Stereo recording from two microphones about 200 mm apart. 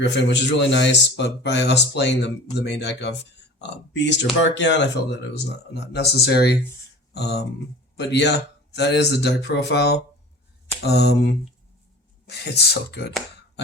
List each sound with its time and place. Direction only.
0.0 s speech: 60° left (ahead or behind)